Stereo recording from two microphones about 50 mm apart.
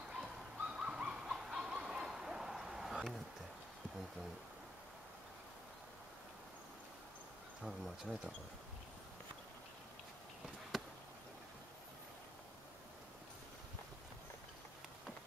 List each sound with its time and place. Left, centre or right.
0.6 s bird: centre
1.3 s a sound: centre
7.6 s speech: centre
10.7 s chop: centre